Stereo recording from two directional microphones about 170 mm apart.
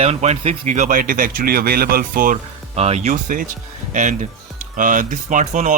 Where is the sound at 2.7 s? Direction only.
40° right (ahead or behind).